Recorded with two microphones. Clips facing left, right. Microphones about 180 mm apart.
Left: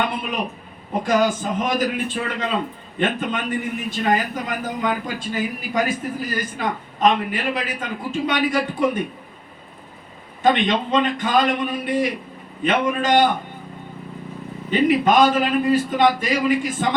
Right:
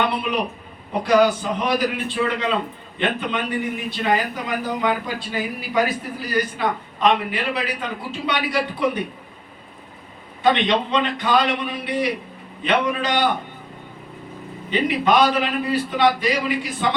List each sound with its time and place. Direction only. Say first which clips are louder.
0.0 s a man's voice: right 2 dB; 45° left (ahead or behind)
10.4 s a man's voice: even; 45° left (ahead or behind)
14.7 s a man's voice: left 2 dB; 45° left (ahead or behind)